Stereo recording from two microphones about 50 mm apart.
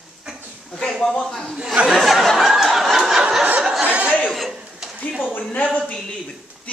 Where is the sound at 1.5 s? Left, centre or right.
Centre.